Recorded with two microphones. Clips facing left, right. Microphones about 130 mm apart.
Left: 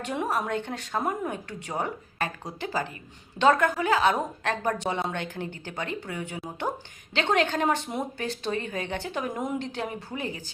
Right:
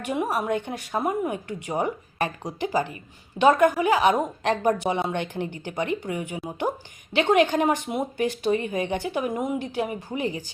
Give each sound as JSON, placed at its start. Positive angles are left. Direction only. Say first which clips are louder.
{"t": 0.0, "sound": "speech", "louder": "right 3 dB", "side_deg": -10}